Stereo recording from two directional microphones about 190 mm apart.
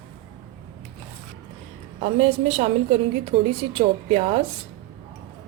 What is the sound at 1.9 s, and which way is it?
A woman's voice, 35° right (ahead or behind).